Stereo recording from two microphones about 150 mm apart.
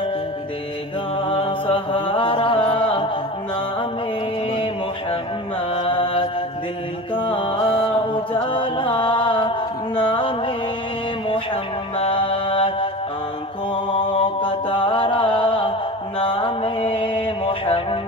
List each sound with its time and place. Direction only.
1.1 s mantra: 35° left (ahead or behind)
5.7 s mantra: 35° left (ahead or behind)
7.2 s music: 35° left (ahead or behind)
13.9 s mantra: 35° left (ahead or behind)